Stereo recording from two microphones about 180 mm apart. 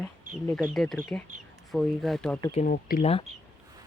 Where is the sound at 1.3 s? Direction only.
40° right (ahead or behind).